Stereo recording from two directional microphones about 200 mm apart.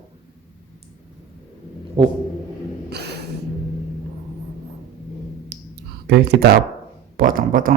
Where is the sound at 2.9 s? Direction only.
55° right (ahead or behind).